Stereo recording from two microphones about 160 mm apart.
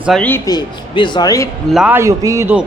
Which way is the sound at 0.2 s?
10° left (ahead or behind).